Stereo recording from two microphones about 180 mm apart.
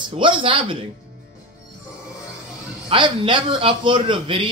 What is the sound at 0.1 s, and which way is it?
Speech, 30° right (ahead or behind).